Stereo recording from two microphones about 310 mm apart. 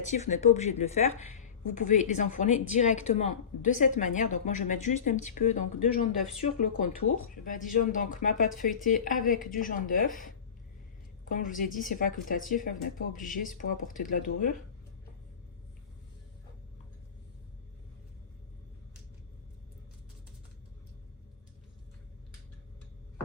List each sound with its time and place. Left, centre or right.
0.1 s speech: left
7.1 s speech: left
7.4 s speech: left